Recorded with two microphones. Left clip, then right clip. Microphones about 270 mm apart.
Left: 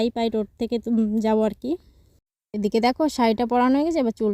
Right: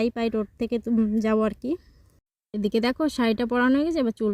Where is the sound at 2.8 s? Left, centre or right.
Left.